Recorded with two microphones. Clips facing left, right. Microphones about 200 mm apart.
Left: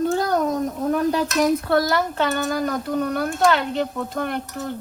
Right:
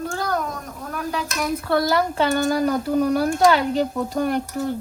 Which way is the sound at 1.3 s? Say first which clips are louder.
Left 4 dB; centre (ahead or behind).